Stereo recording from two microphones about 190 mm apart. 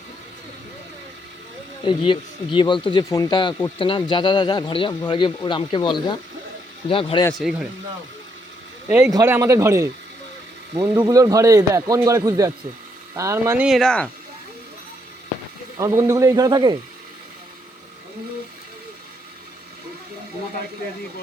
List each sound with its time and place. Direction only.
1.8 s speech: 25° left (ahead or behind)
8.9 s speech: 10° right (ahead or behind)
13.7 s speech: centre (ahead or behind)
15.8 s speech: 15° right (ahead or behind)